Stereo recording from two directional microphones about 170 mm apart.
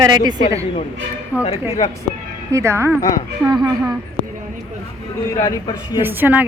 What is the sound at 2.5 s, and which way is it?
Speech, 15° right (ahead or behind).